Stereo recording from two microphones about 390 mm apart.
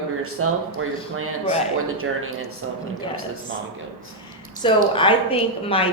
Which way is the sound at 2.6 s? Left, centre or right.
Right.